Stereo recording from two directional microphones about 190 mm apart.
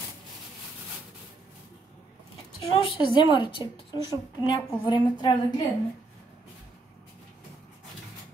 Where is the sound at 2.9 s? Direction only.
25° left (ahead or behind).